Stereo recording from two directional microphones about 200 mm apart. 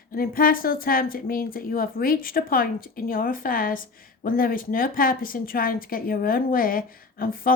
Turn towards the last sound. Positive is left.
turn(degrees=45)  # may be behind; listen again after turning